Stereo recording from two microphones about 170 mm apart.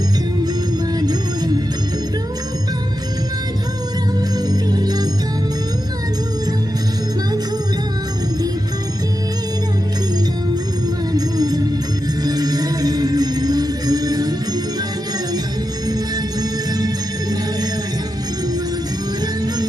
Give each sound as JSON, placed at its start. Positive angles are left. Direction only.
{"t": 0.9, "sound": "music", "side_deg": -25}
{"t": 4.4, "sound": "music", "side_deg": -25}
{"t": 11.1, "sound": "music", "side_deg": -20}
{"t": 16.4, "sound": "music", "side_deg": -25}